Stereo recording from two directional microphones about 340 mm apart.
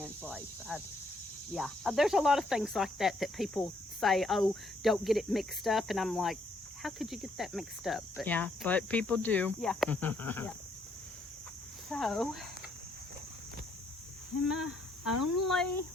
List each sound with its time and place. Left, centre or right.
0.0 s cricket: centre
11.9 s cricket: centre
14.5 s cricket: centre
15.1 s speech: left